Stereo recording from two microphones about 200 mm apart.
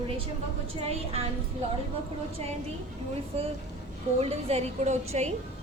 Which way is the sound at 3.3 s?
35° right (ahead or behind).